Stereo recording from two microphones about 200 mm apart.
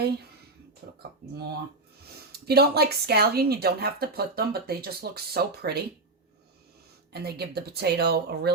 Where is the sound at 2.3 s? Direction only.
50° right (ahead or behind).